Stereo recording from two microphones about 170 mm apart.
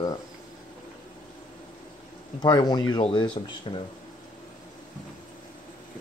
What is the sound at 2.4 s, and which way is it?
Speech, 25° left (ahead or behind).